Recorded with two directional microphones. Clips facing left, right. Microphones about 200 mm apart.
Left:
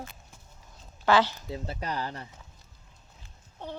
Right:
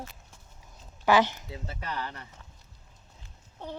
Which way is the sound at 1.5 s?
35° left (ahead or behind).